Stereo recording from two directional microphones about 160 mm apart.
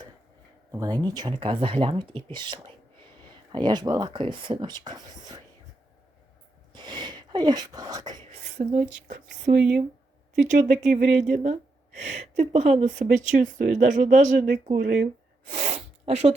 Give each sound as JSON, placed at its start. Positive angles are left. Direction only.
{"t": 0.7, "sound": "speech", "side_deg": -20}
{"t": 6.7, "sound": "a sound", "side_deg": -30}
{"t": 8.5, "sound": "speech", "side_deg": -50}
{"t": 9.4, "sound": "speech", "side_deg": -65}
{"t": 10.4, "sound": "speech", "side_deg": -50}
{"t": 11.5, "sound": "speech", "side_deg": -45}
{"t": 15.5, "sound": "sneeze", "side_deg": -45}